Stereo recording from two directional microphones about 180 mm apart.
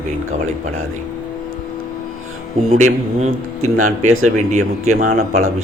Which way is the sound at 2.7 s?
40° right (ahead or behind).